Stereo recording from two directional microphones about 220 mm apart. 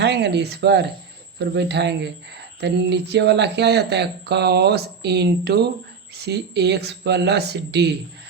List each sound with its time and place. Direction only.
0.0 s speech: 50° right (ahead or behind)